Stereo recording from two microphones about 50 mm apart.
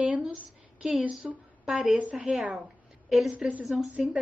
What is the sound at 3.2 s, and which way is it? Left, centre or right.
Speech, centre.